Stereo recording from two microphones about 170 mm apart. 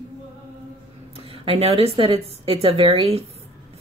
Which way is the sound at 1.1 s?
35° right (ahead or behind).